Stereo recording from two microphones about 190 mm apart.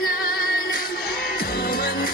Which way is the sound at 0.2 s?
50° left (ahead or behind).